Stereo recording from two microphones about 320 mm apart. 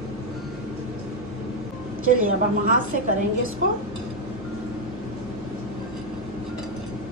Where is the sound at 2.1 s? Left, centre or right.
Right.